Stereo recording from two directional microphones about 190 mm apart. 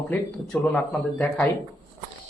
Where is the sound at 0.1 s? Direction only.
10° left (ahead or behind).